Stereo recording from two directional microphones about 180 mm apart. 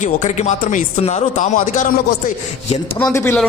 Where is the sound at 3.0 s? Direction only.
10° left (ahead or behind).